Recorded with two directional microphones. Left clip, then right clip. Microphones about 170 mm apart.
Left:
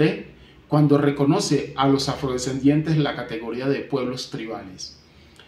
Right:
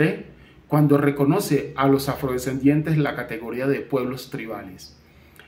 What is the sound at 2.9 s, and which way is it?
Speech, 10° right (ahead or behind).